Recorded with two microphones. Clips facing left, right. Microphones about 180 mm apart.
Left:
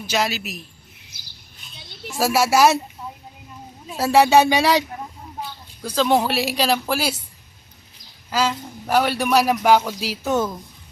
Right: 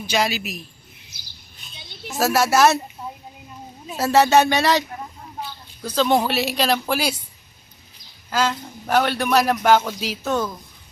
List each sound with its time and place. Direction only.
0.0 s speech: centre (ahead or behind)
2.1 s a man's voice: 10° left (ahead or behind)
3.9 s a man's voice: 10° left (ahead or behind)
8.3 s a man's voice: 5° left (ahead or behind)
10.3 s a woman's voice: 20° left (ahead or behind)